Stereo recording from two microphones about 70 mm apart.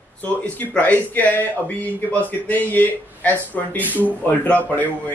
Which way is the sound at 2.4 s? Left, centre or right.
Left.